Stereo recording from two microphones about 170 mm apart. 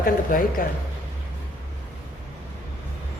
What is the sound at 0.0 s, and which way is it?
Speech, 55° left (ahead or behind).